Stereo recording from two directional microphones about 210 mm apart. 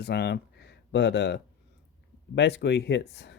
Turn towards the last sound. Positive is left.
turn(degrees=55)  # may be behind; listen again after turning